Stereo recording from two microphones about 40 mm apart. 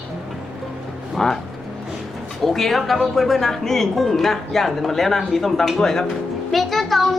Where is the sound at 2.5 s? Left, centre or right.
Centre.